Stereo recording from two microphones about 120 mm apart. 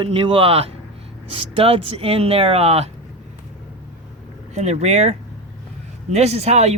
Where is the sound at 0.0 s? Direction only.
45° right (ahead or behind).